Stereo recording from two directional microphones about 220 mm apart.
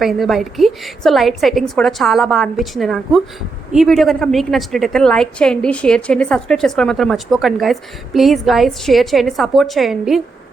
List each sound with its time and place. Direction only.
0.0 s a woman's voice: centre (ahead or behind)